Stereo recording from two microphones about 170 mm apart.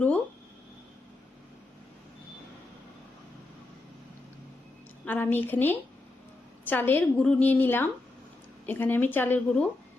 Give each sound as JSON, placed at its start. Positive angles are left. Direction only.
{"t": 5.0, "sound": "a woman's voice", "side_deg": 10}